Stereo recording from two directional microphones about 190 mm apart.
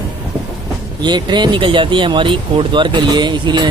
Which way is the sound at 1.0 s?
25° right (ahead or behind).